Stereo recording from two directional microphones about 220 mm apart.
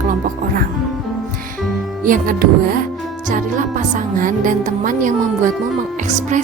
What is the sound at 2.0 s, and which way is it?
Speech, 40° right (ahead or behind).